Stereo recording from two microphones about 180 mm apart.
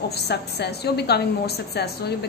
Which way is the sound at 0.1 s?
65° left (ahead or behind).